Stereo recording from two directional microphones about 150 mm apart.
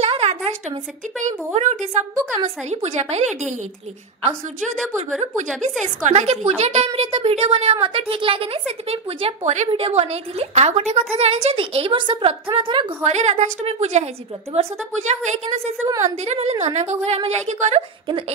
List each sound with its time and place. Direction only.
0.0 s a sound: 45° right (ahead or behind)
1.2 s a woman's voice: 50° right (ahead or behind)
5.6 s a woman's voice: 50° right (ahead or behind); by 12.8 s 35° right (ahead or behind)
13.0 s a woman's voice: 50° right (ahead or behind)